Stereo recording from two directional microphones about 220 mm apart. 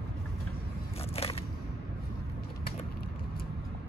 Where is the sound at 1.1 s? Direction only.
25° left (ahead or behind).